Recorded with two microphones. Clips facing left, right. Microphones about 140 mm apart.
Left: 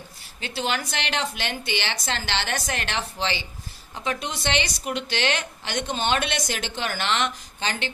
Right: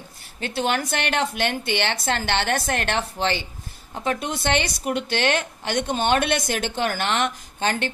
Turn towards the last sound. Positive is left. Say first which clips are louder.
# right 5 dB
turn(degrees=-50)  # may be behind; listen again after turning